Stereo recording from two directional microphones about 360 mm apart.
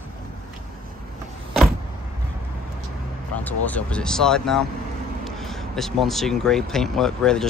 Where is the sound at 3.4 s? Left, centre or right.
Centre.